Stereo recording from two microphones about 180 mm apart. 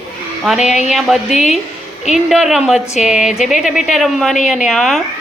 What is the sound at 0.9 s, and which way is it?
Speech, centre (ahead or behind).